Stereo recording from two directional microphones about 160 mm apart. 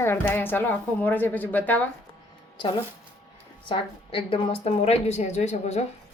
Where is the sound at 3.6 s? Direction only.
30° left (ahead or behind).